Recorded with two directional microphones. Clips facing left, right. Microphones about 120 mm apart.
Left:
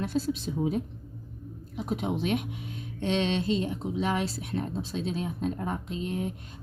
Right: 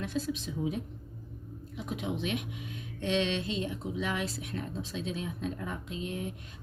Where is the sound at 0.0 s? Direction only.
35° left (ahead or behind).